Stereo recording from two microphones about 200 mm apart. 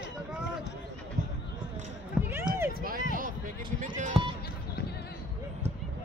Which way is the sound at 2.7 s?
45° right (ahead or behind).